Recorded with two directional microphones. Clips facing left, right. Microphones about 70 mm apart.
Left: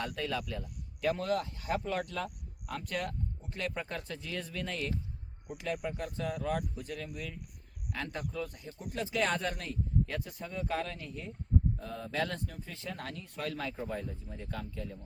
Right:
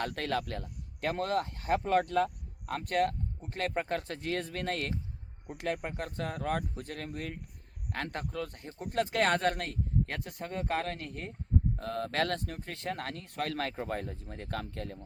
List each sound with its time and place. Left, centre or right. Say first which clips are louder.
0.0 s speech: right 3 dB; right
11.8 s speech: right 4 dB; right